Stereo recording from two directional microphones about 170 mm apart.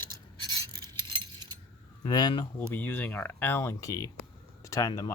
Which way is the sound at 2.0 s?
25° left (ahead or behind).